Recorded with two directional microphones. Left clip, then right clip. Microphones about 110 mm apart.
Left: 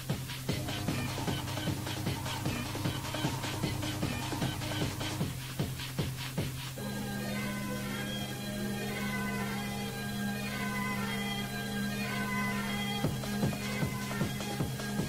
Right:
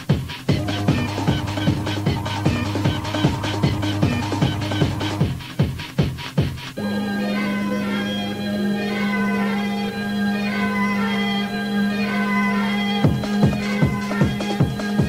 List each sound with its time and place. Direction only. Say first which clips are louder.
0.5 s music: right 14 dB; 35° left (ahead or behind)
7.2 s music: right 13 dB; 35° left (ahead or behind)
8.8 s change ringing: right 12 dB; 40° left (ahead or behind)
10.3 s music: right 13 dB; 35° left (ahead or behind)